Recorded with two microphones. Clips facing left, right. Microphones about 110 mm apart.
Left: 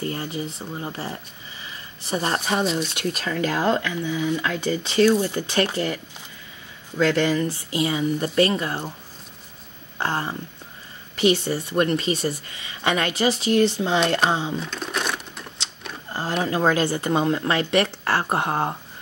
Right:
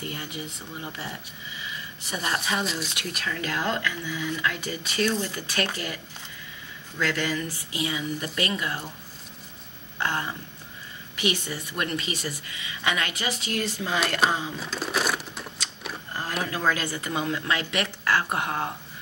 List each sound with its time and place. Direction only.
0.0 s a woman's voice: 35° left (ahead or behind)
2.6 s speech: centre (ahead or behind)
3.0 s speech: 30° left (ahead or behind)
7.0 s a woman's voice: 25° left (ahead or behind)
9.9 s a woman's voice: 35° left (ahead or behind)
14.6 s a sound: 5° right (ahead or behind)
16.1 s a sound: 30° left (ahead or behind)
16.4 s a woman's voice: 30° left (ahead or behind)